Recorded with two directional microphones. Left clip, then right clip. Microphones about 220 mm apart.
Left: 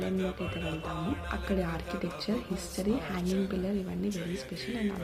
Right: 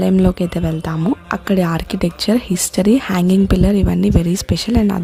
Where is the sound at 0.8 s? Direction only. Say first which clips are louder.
Right 14 dB; 55° right (ahead or behind).